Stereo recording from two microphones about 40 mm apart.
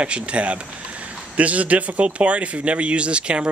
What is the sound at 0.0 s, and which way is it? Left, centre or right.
A man's voice, right.